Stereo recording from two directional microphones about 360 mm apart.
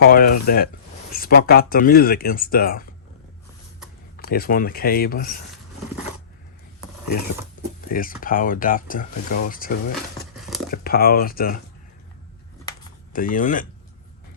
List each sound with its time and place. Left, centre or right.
0.0 s speech: left
4.2 s speech: left
7.9 s speech: left
13.1 s speech: left